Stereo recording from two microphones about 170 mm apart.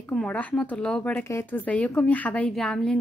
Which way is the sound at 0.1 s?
5° left (ahead or behind).